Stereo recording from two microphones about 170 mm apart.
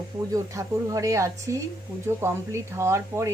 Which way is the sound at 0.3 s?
20° right (ahead or behind).